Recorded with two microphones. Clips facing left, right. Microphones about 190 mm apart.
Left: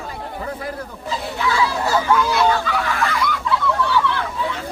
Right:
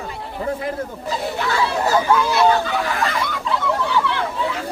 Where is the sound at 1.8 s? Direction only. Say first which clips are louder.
Right 2 dB; 15° right (ahead or behind).